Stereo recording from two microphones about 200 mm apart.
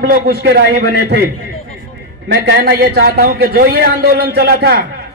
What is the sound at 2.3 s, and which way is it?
A man's voice, 50° right (ahead or behind).